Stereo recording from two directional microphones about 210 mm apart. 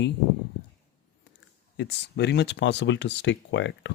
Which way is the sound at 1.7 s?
55° left (ahead or behind).